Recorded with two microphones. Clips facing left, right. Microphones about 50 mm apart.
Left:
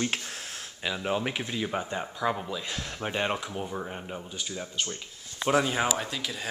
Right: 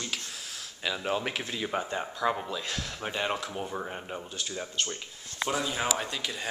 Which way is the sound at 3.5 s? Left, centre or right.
Centre.